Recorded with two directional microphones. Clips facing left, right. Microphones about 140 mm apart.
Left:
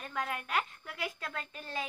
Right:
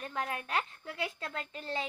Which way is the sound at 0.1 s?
25° right (ahead or behind).